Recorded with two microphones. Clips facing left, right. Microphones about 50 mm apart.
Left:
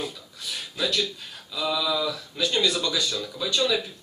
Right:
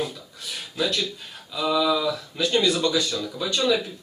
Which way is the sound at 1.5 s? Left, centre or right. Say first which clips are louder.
Right 4 dB; centre.